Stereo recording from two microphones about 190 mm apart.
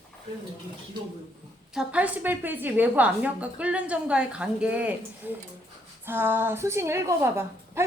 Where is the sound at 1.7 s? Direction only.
5° right (ahead or behind).